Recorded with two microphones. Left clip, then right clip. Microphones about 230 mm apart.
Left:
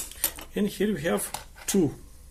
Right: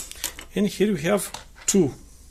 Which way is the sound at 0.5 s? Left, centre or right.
Right.